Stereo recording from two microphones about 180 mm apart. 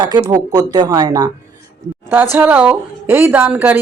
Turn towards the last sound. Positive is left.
turn(degrees=-10)  # may be behind; listen again after turning